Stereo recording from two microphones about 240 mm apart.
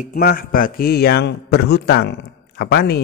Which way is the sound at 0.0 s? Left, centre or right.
Left.